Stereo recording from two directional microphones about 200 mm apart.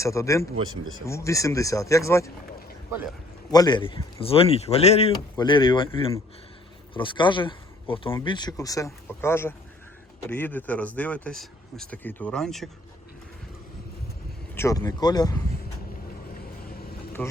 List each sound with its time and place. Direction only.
0.0 s speech: 15° left (ahead or behind)
3.5 s speech: 20° left (ahead or behind)
6.9 s speech: 25° left (ahead or behind); by 12.7 s centre (ahead or behind)
14.5 s speech: 15° left (ahead or behind)
17.2 s a man's voice: 10° left (ahead or behind)